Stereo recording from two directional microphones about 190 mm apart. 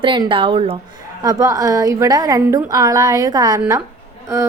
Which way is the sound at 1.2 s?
20° right (ahead or behind).